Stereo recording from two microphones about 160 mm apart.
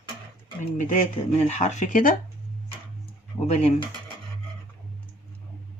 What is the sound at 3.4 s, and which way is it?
Speech, 45° left (ahead or behind).